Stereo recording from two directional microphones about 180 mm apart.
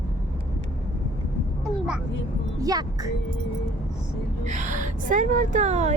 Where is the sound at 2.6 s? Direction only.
20° right (ahead or behind).